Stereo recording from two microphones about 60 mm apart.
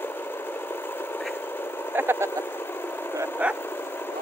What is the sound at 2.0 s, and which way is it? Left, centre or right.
Speech, right.